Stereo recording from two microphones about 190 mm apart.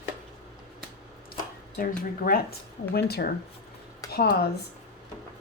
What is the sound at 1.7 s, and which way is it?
Speech, 50° left (ahead or behind).